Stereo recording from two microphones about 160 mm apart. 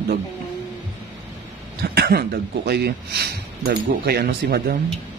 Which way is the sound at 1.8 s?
80° right.